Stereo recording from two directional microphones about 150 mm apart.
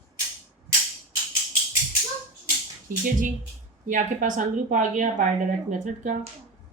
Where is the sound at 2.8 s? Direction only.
60° right (ahead or behind).